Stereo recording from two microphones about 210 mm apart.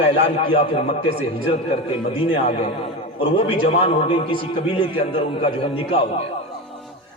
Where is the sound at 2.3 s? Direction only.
30° left (ahead or behind).